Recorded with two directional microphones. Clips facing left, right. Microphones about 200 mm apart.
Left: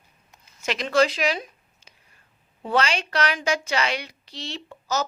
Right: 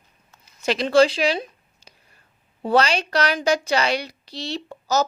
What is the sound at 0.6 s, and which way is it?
A woman's voice, 35° right (ahead or behind).